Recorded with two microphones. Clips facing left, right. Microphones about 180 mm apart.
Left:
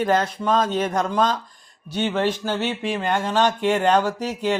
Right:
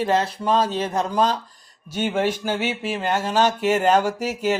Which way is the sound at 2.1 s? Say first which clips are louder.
Right 1 dB; 10° right (ahead or behind).